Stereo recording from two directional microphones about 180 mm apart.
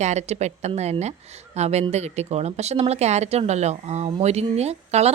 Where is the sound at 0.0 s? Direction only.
40° right (ahead or behind).